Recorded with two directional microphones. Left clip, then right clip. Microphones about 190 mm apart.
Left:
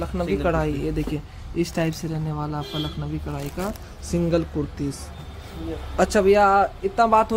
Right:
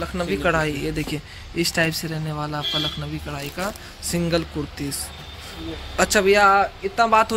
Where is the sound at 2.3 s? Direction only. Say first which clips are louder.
Right 7 dB; 20° right (ahead or behind).